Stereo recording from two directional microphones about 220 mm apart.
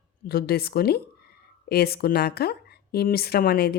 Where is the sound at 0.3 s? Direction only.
45° left (ahead or behind).